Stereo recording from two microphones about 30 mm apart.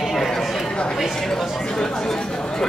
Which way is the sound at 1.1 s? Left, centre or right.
Centre.